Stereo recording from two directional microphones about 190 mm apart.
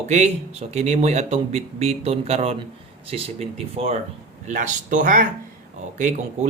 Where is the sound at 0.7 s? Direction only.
35° right (ahead or behind).